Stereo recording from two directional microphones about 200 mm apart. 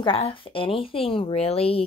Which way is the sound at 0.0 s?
25° left (ahead or behind).